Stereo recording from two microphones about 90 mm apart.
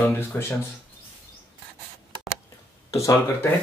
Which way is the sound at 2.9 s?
35° left (ahead or behind).